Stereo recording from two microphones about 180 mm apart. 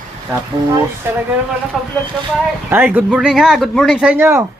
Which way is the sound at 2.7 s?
10° right (ahead or behind).